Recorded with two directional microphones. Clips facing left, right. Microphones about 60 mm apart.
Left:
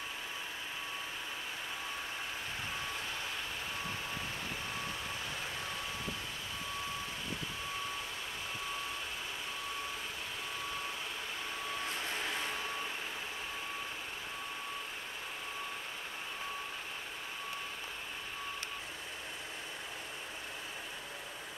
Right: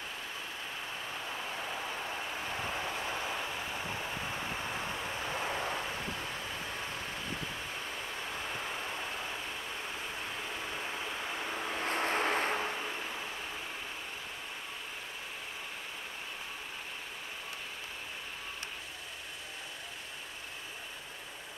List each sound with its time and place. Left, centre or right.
3.1 s vehicle: right
5.3 s vehicle: right
11.8 s vehicle: right